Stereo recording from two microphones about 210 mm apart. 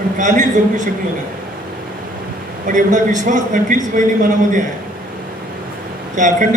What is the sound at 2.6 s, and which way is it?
A man's voice, 35° right (ahead or behind).